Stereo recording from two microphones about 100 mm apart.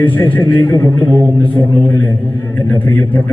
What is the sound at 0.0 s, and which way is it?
Speech, 25° left (ahead or behind).